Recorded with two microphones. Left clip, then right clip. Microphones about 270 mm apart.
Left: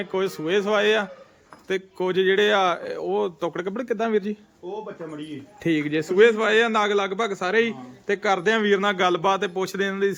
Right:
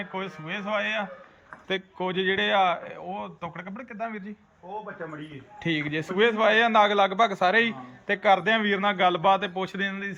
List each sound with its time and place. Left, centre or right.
0.0 s a man's voice: left
5.6 s a man's voice: centre